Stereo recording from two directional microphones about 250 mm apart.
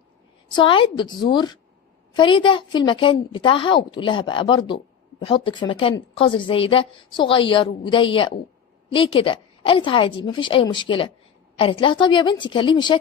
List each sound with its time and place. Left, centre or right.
0.5 s a woman's voice: centre